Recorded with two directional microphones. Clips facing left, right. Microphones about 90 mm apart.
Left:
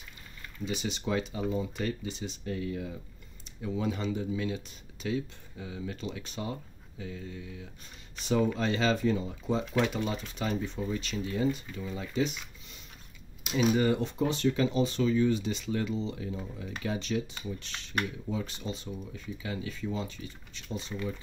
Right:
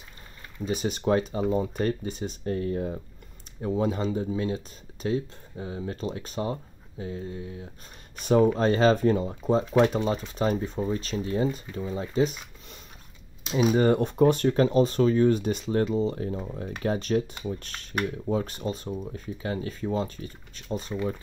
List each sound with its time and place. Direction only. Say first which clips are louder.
0.7 s speech: right 8 dB; 45° right (ahead or behind)
8.2 s speech: right 7 dB; 50° right (ahead or behind)
20.9 s speech: right 6 dB; 20° right (ahead or behind)